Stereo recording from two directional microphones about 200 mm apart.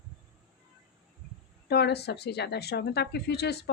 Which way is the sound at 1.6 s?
55° left (ahead or behind).